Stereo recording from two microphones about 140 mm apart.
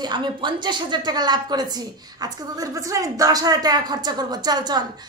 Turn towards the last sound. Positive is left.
turn(degrees=-30)  # may be behind; listen again after turning